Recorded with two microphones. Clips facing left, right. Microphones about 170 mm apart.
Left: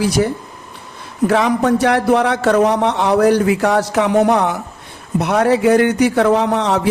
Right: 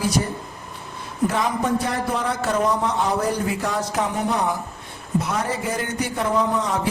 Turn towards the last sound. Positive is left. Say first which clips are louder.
# left 7 dB
turn(degrees=75)  # may be behind; listen again after turning